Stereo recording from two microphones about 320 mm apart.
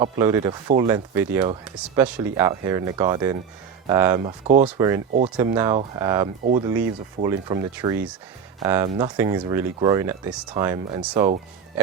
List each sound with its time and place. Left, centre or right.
0.0 s speech: centre
6.4 s speech: right
6.7 s speech: centre